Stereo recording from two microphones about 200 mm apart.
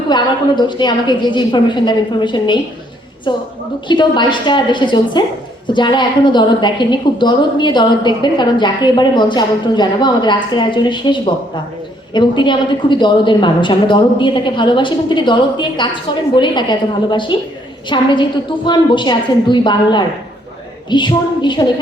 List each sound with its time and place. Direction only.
0.1 s a woman's voice: 20° left (ahead or behind)